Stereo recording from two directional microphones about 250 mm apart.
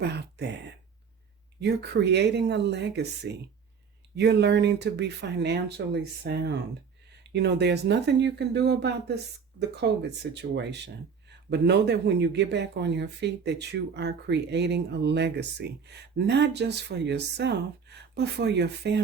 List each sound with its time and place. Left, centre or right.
0.0 s speech: right
1.6 s a man's voice: right